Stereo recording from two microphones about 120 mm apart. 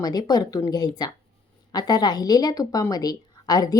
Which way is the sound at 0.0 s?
35° left (ahead or behind).